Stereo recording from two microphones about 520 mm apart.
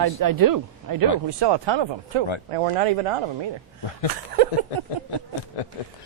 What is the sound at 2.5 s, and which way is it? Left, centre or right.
Speech, right.